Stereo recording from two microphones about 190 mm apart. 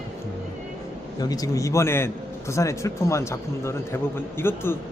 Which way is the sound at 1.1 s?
20° left (ahead or behind).